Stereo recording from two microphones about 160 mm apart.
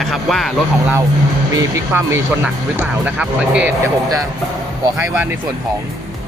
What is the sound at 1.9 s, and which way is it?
Speech, 15° right (ahead or behind).